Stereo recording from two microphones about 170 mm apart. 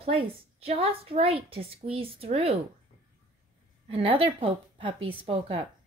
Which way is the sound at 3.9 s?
30° right (ahead or behind).